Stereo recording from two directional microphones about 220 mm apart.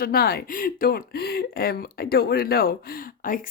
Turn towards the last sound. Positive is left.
turn(degrees=40)  # may be behind; listen again after turning